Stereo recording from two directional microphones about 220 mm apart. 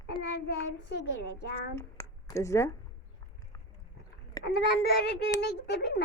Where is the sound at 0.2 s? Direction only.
50° left (ahead or behind).